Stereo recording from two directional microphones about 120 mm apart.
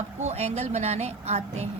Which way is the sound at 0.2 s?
65° right (ahead or behind).